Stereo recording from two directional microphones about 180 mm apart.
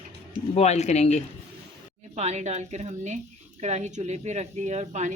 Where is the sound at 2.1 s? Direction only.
40° right (ahead or behind).